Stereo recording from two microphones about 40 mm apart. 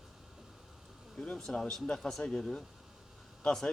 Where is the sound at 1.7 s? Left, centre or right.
Centre.